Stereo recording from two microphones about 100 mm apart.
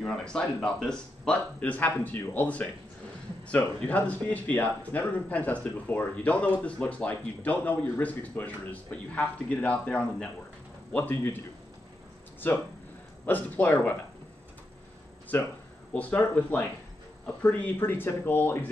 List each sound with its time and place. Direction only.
0.0 s a man's voice: 10° left (ahead or behind)
12.4 s speech: 20° left (ahead or behind)
15.3 s speech: 20° left (ahead or behind)